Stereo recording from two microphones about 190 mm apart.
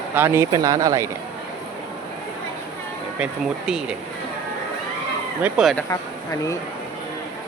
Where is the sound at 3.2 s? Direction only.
Centre (ahead or behind).